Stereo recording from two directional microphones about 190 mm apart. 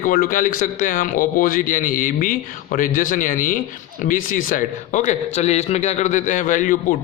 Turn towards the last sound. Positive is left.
turn(degrees=45)  # may be behind; listen again after turning